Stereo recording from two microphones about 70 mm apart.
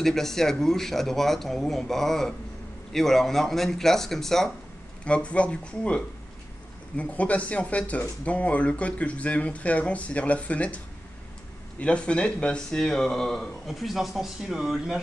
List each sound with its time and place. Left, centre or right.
0.0 s speech: centre
5.0 s speech: centre
11.8 s speech: centre